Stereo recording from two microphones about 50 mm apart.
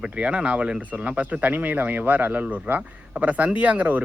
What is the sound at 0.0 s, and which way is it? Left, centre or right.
Speech, right.